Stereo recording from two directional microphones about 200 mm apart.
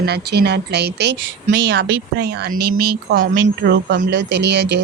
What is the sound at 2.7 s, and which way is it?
Speech, 50° right (ahead or behind).